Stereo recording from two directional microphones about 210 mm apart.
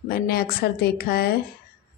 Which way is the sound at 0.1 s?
45° left (ahead or behind).